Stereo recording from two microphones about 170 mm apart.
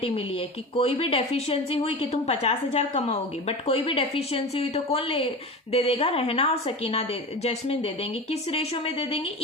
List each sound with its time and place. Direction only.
0.0 s speech: 35° left (ahead or behind)